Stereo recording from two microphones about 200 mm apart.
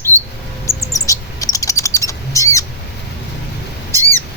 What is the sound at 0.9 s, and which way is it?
Bird, 15° left (ahead or behind).